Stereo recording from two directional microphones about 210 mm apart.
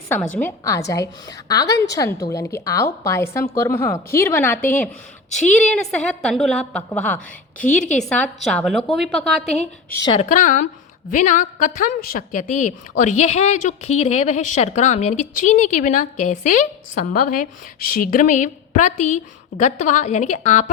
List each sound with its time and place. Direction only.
0.3 s a woman's voice: 10° left (ahead or behind)
9.9 s speech: 20° left (ahead or behind)
10.2 s a woman's voice: 35° left (ahead or behind)